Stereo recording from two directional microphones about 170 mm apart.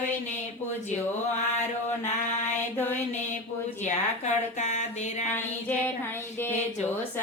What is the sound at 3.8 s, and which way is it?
Speech, 45° left (ahead or behind).